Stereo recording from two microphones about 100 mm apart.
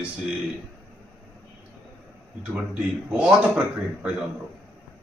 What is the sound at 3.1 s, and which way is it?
Speech, 10° right (ahead or behind).